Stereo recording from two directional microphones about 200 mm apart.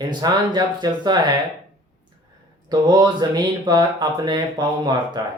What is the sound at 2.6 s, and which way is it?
Speech, 20° right (ahead or behind).